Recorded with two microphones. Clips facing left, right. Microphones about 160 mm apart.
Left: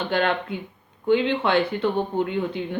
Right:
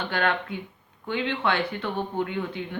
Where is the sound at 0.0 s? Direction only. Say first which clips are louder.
Left 3 dB; 25° left (ahead or behind).